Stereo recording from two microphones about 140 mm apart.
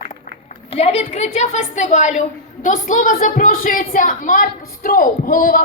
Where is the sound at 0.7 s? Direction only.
50° left (ahead or behind).